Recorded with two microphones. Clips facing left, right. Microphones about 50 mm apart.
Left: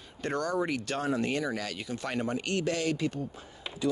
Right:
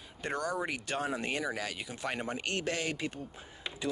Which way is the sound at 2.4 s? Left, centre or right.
Right.